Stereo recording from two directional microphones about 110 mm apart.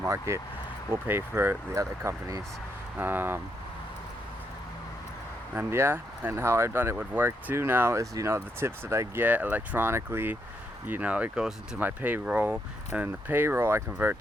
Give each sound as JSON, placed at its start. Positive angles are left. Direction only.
{"t": 0.0, "sound": "speech", "side_deg": -25}
{"t": 3.0, "sound": "speech", "side_deg": -15}
{"t": 5.5, "sound": "speech", "side_deg": -20}
{"t": 11.8, "sound": "speech", "side_deg": -15}